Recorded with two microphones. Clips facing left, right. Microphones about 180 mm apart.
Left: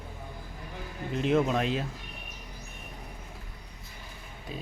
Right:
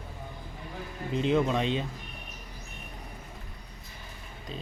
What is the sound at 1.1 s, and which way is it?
Speech, 5° left (ahead or behind).